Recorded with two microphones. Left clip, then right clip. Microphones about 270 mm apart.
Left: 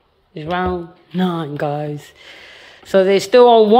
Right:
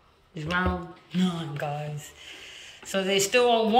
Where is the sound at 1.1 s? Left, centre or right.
Centre.